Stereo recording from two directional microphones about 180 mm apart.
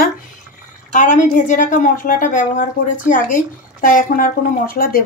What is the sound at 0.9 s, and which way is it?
A woman's voice, 45° left (ahead or behind).